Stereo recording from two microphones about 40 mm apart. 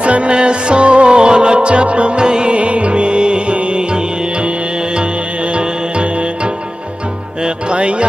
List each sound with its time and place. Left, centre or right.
0.0 s music: right